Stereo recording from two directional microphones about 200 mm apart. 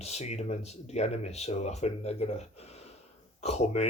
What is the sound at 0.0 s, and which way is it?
Speech, 35° left (ahead or behind).